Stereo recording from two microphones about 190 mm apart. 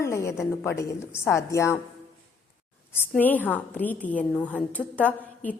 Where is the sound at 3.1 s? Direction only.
10° left (ahead or behind).